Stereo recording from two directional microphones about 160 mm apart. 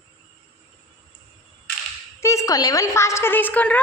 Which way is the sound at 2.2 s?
20° left (ahead or behind).